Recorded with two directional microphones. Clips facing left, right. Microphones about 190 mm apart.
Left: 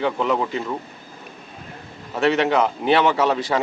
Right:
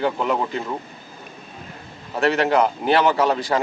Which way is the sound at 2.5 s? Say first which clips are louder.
Even; centre (ahead or behind).